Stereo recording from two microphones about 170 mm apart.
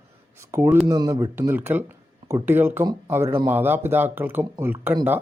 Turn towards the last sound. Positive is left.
turn(degrees=-10)  # may be behind; listen again after turning